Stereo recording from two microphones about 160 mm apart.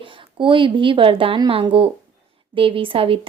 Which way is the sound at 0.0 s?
30° right (ahead or behind).